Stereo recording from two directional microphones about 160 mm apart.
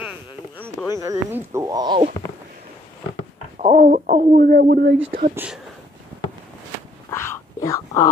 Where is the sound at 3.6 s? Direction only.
55° right (ahead or behind); by 4.9 s 70° right (ahead or behind).